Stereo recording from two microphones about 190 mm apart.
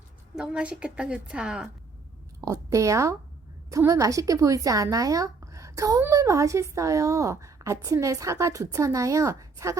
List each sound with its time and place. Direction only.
0.3 s a woman's voice: 5° right (ahead or behind)
2.4 s a woman's voice: 15° right (ahead or behind)